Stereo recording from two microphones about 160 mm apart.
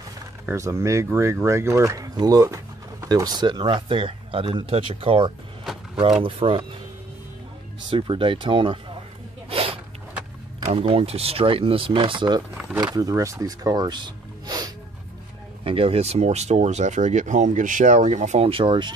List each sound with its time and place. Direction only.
0.5 s speech: 20° right (ahead or behind); by 6.6 s 35° right (ahead or behind)
7.9 s speech: 30° right (ahead or behind)
9.5 s a sound: 35° right (ahead or behind)
10.7 s speech: 35° right (ahead or behind)
15.6 s speech: 35° right (ahead or behind)